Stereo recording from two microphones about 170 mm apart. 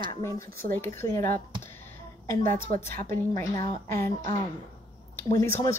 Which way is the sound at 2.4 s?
50° right (ahead or behind).